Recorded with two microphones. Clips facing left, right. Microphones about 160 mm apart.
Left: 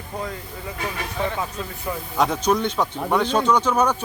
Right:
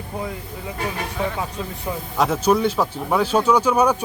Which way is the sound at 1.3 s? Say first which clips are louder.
Right 1 dB; 10° right (ahead or behind).